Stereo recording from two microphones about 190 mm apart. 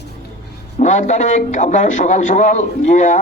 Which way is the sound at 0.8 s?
40° left (ahead or behind).